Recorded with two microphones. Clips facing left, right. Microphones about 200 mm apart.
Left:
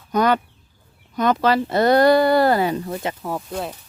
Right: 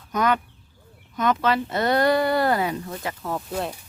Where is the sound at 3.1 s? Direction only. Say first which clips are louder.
Left 2 dB; 15° left (ahead or behind).